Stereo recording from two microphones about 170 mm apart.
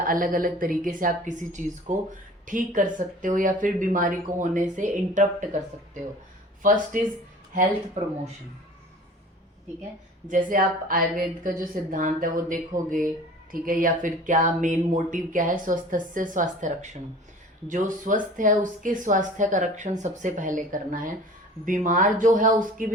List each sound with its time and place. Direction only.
0.0 s speech: 55° right (ahead or behind)
7.5 s speech: 40° right (ahead or behind)
10.2 s speech: 50° right (ahead or behind)